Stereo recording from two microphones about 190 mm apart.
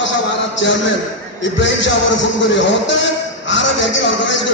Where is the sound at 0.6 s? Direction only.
70° left (ahead or behind).